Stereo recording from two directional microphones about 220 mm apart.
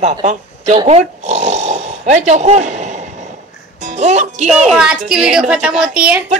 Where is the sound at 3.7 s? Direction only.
30° right (ahead or behind).